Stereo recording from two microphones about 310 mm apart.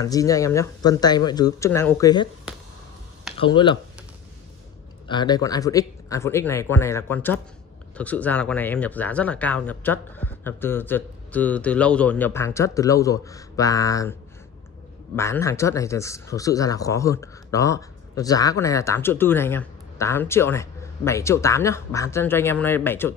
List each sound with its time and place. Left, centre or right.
0.0 s speech: centre
3.3 s speech: centre
5.0 s speech: centre
15.1 s speech: centre